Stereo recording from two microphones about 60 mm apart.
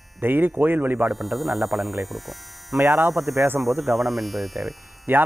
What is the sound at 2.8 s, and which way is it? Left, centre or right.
Speech, right.